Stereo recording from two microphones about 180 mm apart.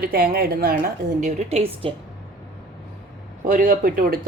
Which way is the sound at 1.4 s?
35° right (ahead or behind).